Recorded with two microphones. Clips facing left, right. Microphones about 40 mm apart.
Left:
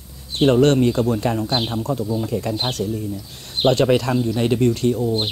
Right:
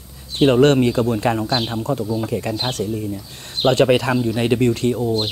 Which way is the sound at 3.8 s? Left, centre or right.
Centre.